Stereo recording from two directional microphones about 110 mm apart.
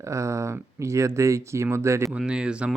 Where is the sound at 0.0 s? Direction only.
25° right (ahead or behind).